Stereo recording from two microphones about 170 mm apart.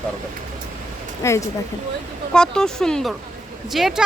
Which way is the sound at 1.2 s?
15° left (ahead or behind).